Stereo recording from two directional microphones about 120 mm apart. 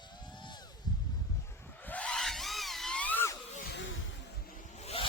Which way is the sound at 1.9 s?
10° left (ahead or behind).